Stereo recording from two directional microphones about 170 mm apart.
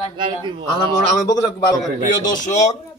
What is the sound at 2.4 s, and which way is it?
Speech, 40° left (ahead or behind).